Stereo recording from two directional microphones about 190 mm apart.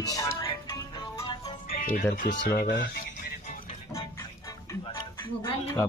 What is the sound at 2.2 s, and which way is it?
Speech, 70° left (ahead or behind).